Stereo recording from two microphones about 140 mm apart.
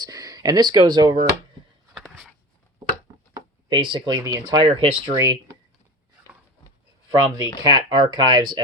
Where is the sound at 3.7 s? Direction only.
35° right (ahead or behind).